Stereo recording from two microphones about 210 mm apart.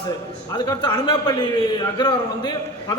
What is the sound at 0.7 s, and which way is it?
A man's voice, 20° left (ahead or behind).